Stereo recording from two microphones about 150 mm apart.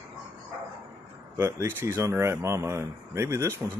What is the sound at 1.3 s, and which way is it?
Speech, 15° right (ahead or behind).